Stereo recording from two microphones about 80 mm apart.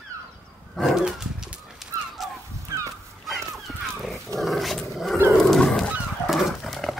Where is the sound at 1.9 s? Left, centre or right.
Right.